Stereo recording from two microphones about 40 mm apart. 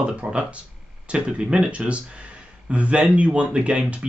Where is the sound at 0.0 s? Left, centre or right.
Right.